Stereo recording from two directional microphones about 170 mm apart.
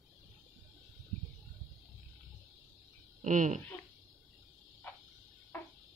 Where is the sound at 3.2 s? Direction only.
45° right (ahead or behind).